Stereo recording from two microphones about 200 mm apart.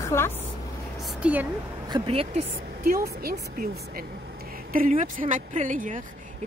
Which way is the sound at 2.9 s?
45° right (ahead or behind).